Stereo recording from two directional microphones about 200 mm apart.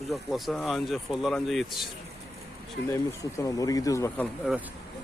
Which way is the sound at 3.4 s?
15° left (ahead or behind).